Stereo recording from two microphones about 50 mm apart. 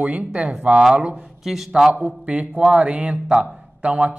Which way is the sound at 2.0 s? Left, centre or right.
Right.